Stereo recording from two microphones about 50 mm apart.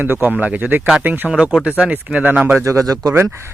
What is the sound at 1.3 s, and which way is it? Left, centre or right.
A man's voice, centre.